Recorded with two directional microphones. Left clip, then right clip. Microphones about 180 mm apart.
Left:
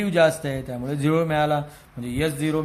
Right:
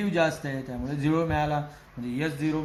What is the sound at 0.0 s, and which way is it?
A man's voice, 45° left (ahead or behind).